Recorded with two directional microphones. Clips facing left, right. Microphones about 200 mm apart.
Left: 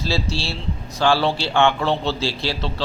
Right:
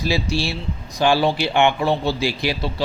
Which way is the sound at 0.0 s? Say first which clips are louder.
Right 3 dB; 15° right (ahead or behind).